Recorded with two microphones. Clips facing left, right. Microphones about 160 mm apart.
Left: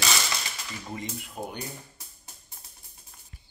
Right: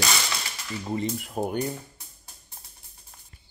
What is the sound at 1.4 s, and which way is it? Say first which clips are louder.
Speech: right 8 dB; 50° right (ahead or behind).